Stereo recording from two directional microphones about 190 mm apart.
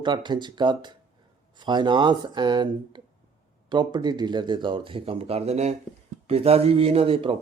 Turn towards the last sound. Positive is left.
turn(degrees=-30)  # may be behind; listen again after turning